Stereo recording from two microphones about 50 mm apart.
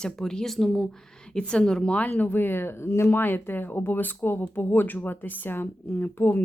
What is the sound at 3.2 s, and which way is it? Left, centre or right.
Speech, left.